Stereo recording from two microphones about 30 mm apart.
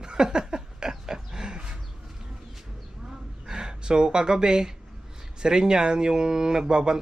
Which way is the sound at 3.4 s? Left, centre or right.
Right.